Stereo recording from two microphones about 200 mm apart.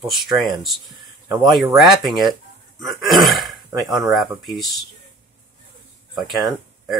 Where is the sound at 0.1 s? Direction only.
Centre (ahead or behind).